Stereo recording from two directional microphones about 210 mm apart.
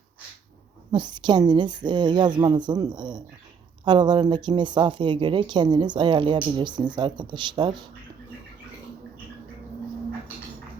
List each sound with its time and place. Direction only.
0.9 s speech: 20° right (ahead or behind)